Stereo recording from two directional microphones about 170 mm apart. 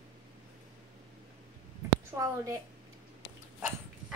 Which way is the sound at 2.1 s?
20° right (ahead or behind).